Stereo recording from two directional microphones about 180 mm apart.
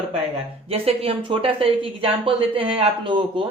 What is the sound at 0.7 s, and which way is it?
Speech, 35° right (ahead or behind).